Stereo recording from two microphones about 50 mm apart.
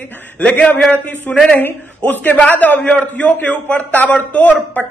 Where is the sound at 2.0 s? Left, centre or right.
Left.